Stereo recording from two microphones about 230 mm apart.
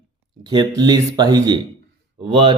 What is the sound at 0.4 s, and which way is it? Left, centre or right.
Speech, centre.